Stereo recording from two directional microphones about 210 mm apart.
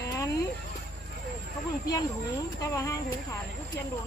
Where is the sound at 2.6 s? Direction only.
15° left (ahead or behind).